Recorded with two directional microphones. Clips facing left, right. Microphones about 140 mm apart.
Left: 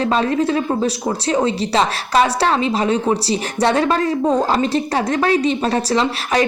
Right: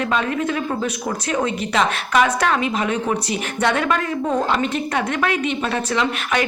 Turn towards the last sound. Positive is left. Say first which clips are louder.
# left 3 dB
turn(degrees=35)  # may be behind; listen again after turning